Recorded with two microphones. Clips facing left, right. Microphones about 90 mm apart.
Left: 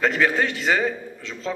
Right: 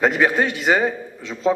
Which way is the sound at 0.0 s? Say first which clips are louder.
Right 3 dB; 20° right (ahead or behind).